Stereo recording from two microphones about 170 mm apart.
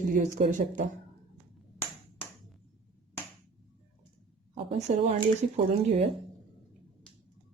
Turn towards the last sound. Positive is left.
turn(degrees=-35)  # may be behind; listen again after turning